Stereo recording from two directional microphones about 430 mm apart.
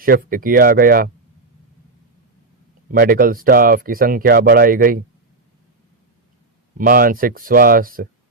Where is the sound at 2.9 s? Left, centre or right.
Centre.